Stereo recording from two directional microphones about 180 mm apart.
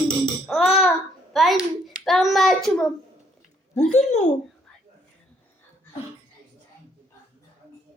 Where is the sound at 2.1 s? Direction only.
Centre (ahead or behind).